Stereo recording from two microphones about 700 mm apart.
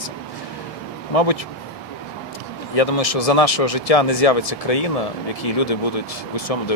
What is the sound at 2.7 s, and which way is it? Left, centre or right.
Speech, left.